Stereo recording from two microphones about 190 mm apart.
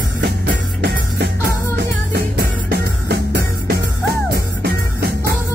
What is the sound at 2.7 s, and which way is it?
Music, 60° right (ahead or behind).